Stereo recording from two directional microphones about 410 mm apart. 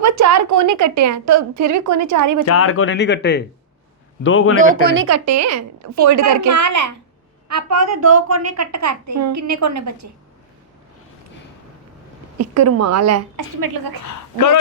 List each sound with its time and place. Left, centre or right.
0.0 s a woman's voice: right
2.5 s speech: left
4.5 s speech: centre
5.0 s a woman's voice: right
12.4 s a woman's voice: right
14.0 s a woman's voice: left